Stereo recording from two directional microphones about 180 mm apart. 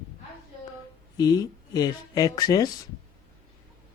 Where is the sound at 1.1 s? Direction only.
20° left (ahead or behind).